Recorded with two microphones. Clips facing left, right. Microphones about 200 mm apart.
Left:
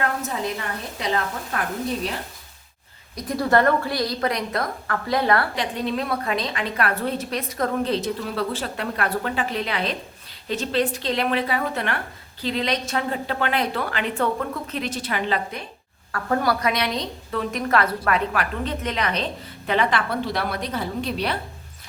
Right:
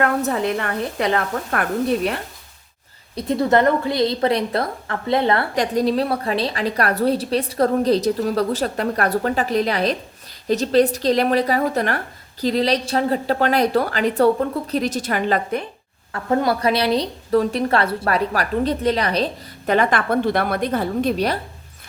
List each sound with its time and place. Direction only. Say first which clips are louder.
0.0 s a woman's voice: right 6 dB; 60° right (ahead or behind)
3.2 s a woman's voice: right 3 dB; 25° right (ahead or behind)
5.5 s a woman's voice: right 7 dB; 40° right (ahead or behind)
16.1 s a woman's voice: right 3 dB; 25° right (ahead or behind); by 21.3 s 45° right (ahead or behind)